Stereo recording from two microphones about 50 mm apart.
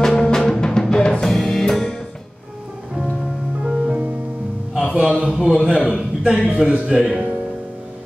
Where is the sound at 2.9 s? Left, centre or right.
Centre.